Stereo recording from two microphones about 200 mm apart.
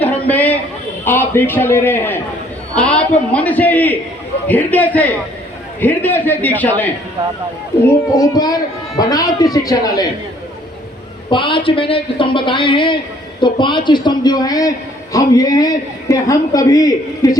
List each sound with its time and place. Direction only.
0.0 s a sound: 10° left (ahead or behind)
1.0 s a man's voice: 10° left (ahead or behind)
11.3 s a woman's voice: 25° left (ahead or behind)